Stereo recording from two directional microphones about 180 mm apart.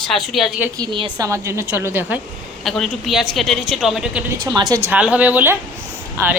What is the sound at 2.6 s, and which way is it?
Speech, centre (ahead or behind).